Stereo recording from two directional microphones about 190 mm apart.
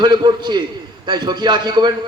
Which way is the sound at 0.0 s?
20° right (ahead or behind).